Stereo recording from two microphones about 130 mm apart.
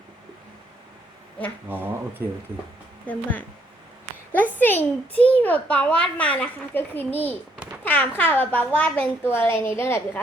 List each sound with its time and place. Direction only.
1.7 s speech: 15° right (ahead or behind)
3.1 s a child's voice: 10° left (ahead or behind)
4.5 s a child's voice: 15° left (ahead or behind)